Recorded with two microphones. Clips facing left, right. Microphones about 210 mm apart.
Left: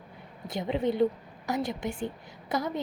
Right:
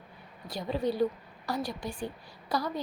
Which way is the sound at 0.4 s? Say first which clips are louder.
Left 2 dB; 25° left (ahead or behind).